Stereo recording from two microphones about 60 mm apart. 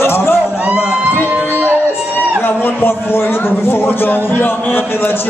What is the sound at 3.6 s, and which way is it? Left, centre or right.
Speech, left.